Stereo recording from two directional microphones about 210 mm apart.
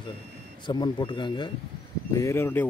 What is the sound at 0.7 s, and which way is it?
A man's voice, 20° left (ahead or behind).